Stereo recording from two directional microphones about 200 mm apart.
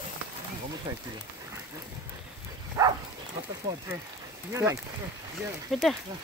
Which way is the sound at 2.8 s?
15° right (ahead or behind).